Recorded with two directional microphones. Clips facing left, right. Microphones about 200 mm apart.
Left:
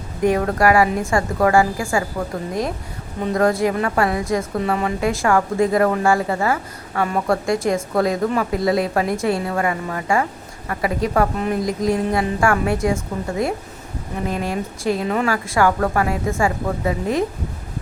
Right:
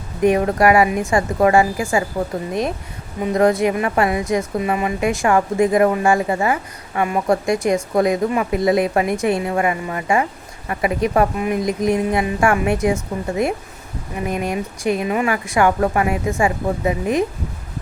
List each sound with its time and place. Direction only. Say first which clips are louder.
0.2 s a woman's voice: right 2 dB; 20° right (ahead or behind)